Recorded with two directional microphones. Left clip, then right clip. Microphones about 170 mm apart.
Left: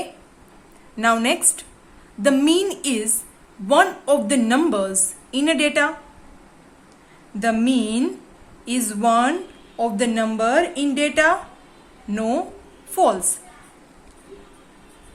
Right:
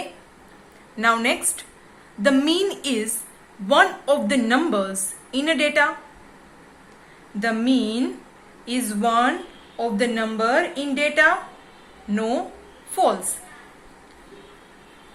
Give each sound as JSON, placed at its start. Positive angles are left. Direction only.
{"t": 0.9, "sound": "a woman's voice", "side_deg": 35}
{"t": 7.3, "sound": "a woman's voice", "side_deg": 40}